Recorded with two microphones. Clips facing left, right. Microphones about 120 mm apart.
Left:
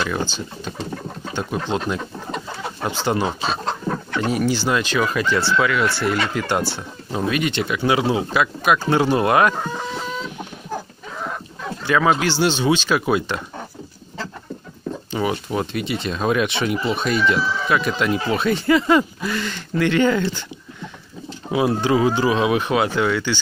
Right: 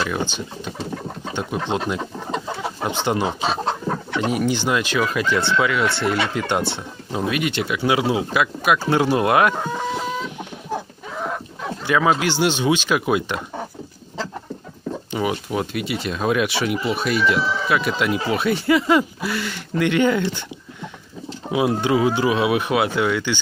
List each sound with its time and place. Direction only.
0.0 s speech: 15° right (ahead or behind)
7.1 s speech: 10° right (ahead or behind)
11.8 s speech: 15° right (ahead or behind)
15.0 s speech: 10° right (ahead or behind)
21.5 s speech: 15° right (ahead or behind)